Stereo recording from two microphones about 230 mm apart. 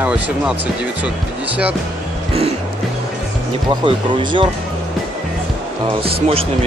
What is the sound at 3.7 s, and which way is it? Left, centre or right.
Speech, centre.